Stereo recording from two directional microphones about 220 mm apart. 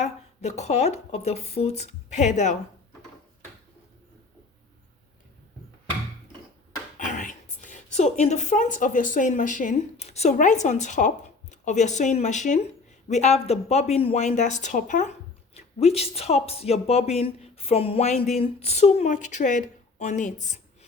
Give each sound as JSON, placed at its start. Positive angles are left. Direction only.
{"t": 0.0, "sound": "speech", "side_deg": 30}
{"t": 7.0, "sound": "speech", "side_deg": 35}